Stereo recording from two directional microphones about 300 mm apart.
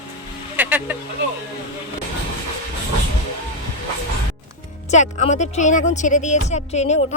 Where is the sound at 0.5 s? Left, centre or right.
Centre.